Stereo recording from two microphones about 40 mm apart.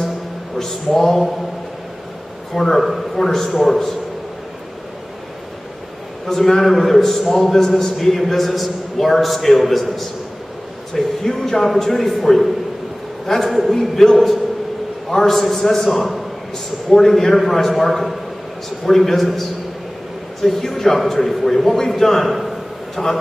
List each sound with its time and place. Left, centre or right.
0.9 s speech: centre
2.5 s a man's voice: centre
6.2 s a man's voice: centre
11.2 s speech: centre
13.5 s a man's voice: centre
20.4 s a man's voice: centre